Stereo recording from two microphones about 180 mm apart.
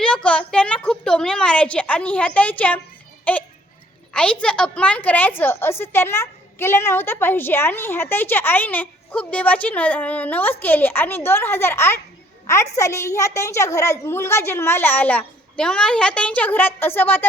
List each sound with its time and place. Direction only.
0.0 s a woman's voice: 5° left (ahead or behind)